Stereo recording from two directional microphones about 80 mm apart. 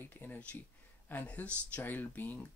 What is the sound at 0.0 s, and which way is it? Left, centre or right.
Speech, left.